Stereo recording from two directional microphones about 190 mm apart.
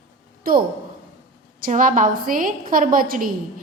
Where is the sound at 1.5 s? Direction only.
45° right (ahead or behind).